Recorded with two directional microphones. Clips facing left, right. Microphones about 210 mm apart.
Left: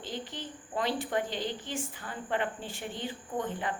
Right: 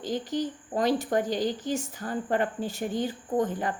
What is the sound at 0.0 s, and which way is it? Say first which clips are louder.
A woman's voice: right 10 dB; 40° right (ahead or behind).